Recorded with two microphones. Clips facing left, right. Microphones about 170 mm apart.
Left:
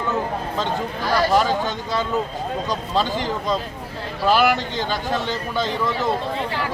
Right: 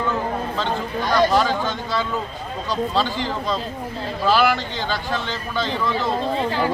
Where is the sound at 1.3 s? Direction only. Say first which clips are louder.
Left 1 dB; 15° left (ahead or behind).